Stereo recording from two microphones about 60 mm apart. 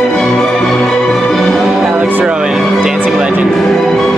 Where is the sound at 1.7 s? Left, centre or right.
Centre.